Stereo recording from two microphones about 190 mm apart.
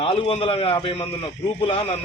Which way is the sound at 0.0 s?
30° left (ahead or behind).